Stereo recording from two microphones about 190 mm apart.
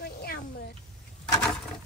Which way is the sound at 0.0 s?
55° left (ahead or behind).